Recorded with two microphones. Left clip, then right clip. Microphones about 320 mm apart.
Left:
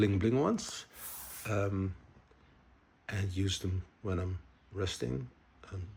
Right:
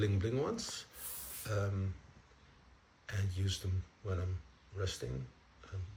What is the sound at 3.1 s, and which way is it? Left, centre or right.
Speech, centre.